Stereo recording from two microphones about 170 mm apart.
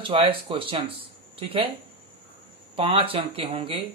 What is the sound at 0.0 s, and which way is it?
Speech, 30° right (ahead or behind).